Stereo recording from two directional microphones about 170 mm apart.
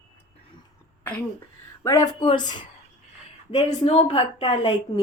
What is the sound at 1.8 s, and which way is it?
Speech, 20° left (ahead or behind).